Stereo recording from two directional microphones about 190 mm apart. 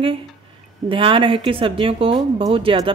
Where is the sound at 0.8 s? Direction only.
30° right (ahead or behind).